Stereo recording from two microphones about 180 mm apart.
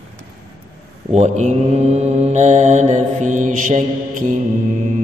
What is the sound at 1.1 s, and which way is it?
Mantra, 40° right (ahead or behind).